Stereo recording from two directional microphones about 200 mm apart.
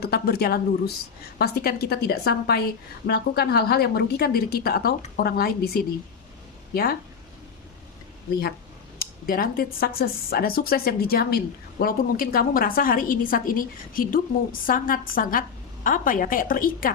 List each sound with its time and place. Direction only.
0.0 s a woman's voice: 50° left (ahead or behind)
9.0 s a woman's voice: 45° left (ahead or behind)